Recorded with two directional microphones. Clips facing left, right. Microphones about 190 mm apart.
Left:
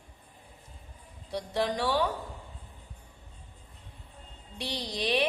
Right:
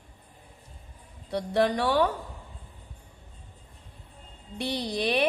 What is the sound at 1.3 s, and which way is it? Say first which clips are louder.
Speech: right 5 dB; 60° right (ahead or behind).